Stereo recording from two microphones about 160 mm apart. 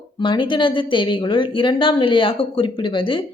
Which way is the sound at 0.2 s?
30° left (ahead or behind).